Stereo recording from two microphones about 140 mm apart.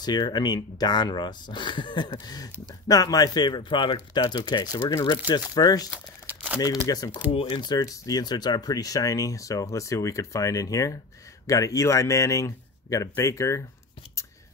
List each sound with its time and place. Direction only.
0.0 s speech: 30° left (ahead or behind)
5.9 s crumpling: 10° right (ahead or behind)
6.9 s speech: 25° left (ahead or behind)
7.3 s speech: 40° left (ahead or behind); by 13.6 s 20° left (ahead or behind)